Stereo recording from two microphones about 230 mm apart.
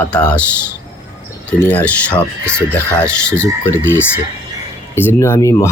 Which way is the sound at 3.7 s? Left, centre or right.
Centre.